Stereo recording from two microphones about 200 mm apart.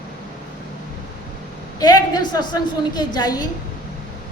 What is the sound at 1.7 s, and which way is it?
A woman's voice, 20° left (ahead or behind).